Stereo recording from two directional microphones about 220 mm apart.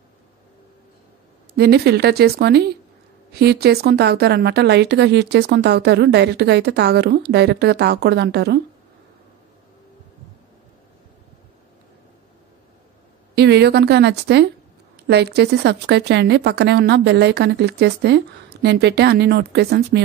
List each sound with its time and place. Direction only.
1.6 s a woman's voice: 45° right (ahead or behind)
13.3 s a woman's voice: 50° right (ahead or behind)